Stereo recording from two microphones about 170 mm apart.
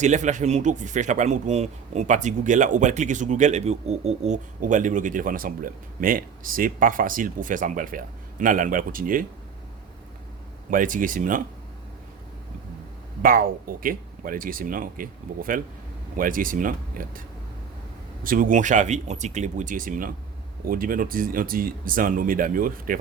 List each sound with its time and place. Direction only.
0.0 s speech: 45° right (ahead or behind)
10.7 s speech: 50° right (ahead or behind)
13.2 s speech: 55° right (ahead or behind)